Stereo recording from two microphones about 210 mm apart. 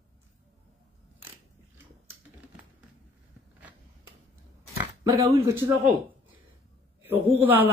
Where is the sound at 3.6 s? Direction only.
10° right (ahead or behind).